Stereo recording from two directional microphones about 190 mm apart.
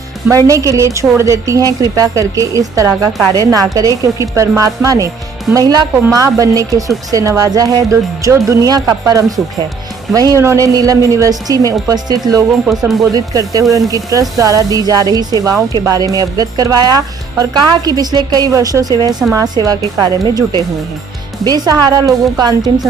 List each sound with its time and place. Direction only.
0.3 s a woman's voice: 15° right (ahead or behind)